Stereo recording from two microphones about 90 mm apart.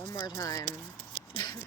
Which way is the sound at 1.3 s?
50° left (ahead or behind).